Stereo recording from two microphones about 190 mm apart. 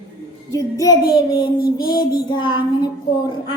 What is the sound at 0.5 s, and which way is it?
Child singing, 20° left (ahead or behind).